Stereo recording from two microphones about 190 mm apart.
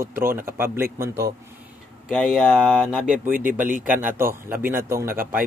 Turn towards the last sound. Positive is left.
turn(degrees=-10)  # may be behind; listen again after turning